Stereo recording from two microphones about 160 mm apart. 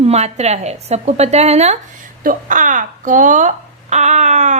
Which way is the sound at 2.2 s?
55° right (ahead or behind).